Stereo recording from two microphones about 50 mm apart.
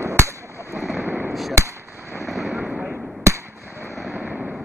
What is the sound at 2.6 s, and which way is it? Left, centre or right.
Fireworks, right.